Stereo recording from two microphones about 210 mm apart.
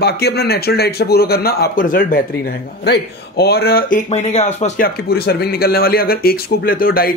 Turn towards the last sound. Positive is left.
turn(degrees=45)  # may be behind; listen again after turning